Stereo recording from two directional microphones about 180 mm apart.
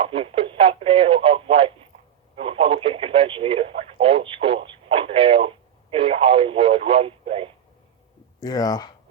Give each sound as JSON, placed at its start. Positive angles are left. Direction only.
{"t": 0.0, "sound": "radio", "side_deg": -30}
{"t": 2.3, "sound": "speech", "side_deg": -30}
{"t": 8.4, "sound": "speech", "side_deg": 20}